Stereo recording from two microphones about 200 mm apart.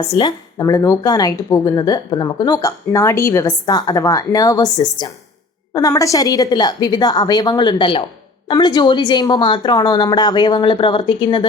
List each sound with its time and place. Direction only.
0.0 s a woman's voice: 20° left (ahead or behind)